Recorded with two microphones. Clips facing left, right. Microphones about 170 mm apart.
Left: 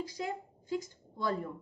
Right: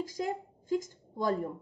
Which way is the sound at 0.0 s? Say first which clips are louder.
Right 3 dB; 45° right (ahead or behind).